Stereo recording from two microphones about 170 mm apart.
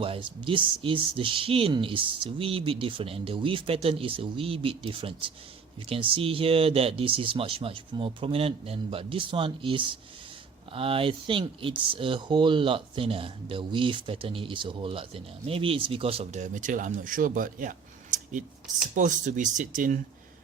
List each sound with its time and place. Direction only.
0.0 s speech: 30° right (ahead or behind); by 20.0 s 50° right (ahead or behind)